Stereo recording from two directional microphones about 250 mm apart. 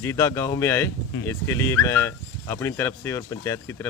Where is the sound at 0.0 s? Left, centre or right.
Centre.